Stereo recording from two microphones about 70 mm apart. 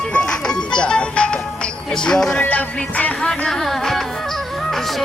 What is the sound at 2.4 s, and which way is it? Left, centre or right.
Music, left.